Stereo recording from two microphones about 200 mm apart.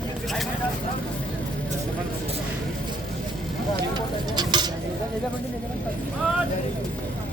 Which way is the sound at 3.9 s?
20° right (ahead or behind).